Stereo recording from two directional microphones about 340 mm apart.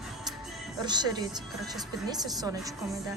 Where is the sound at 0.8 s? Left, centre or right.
Centre.